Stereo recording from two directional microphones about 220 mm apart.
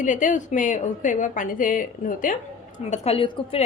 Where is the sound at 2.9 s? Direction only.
25° left (ahead or behind).